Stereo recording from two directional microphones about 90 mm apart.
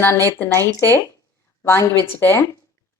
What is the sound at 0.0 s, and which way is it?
Speech, 30° left (ahead or behind).